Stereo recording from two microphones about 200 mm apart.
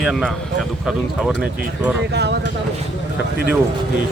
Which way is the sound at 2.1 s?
55° right (ahead or behind).